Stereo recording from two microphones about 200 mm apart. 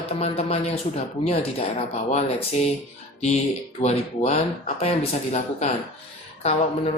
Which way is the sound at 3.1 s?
35° left (ahead or behind).